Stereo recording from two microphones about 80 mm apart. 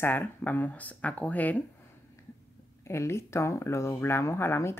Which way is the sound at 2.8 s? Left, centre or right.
Left.